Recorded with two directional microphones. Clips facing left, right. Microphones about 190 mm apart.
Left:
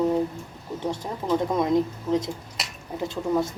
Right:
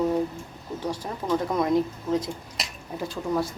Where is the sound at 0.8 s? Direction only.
25° left (ahead or behind).